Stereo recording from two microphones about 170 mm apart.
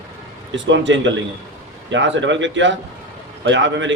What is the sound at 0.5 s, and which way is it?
A man's voice, 90° right.